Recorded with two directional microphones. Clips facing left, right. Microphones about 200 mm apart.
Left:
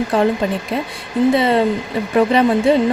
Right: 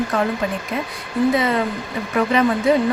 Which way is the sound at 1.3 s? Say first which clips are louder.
Left 5 dB; 30° left (ahead or behind).